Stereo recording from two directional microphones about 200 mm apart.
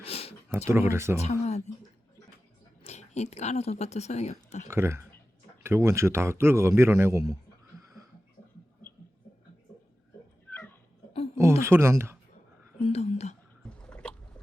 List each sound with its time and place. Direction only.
0.0 s a sound: 30° left (ahead or behind)
0.7 s a man's voice: 15° right (ahead or behind)
1.1 s speech: 35° left (ahead or behind)
2.8 s speech: 35° left (ahead or behind)
4.7 s a man's voice: 10° right (ahead or behind)
10.5 s dog: 10° left (ahead or behind)
11.6 s a man's voice: 15° right (ahead or behind)
12.8 s whispering: 30° left (ahead or behind)
13.7 s boat: 5° left (ahead or behind)